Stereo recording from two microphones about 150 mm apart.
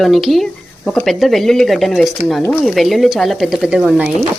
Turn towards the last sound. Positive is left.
turn(degrees=-5)  # may be behind; listen again after turning